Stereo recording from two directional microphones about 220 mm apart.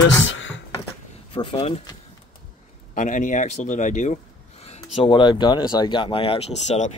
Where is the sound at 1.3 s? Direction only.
20° left (ahead or behind).